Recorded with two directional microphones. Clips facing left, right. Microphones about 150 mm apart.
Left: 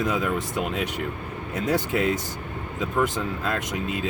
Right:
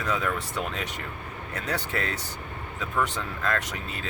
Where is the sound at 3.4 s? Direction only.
15° left (ahead or behind).